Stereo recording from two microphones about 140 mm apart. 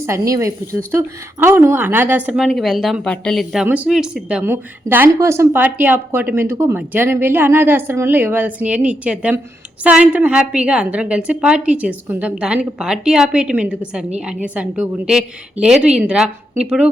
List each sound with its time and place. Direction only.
0.0 s a woman's voice: 20° right (ahead or behind)